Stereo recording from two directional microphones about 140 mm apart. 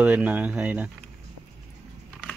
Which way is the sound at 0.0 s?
10° right (ahead or behind).